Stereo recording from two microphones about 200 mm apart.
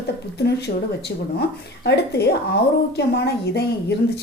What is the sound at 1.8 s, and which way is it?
A woman's voice, 55° left (ahead or behind).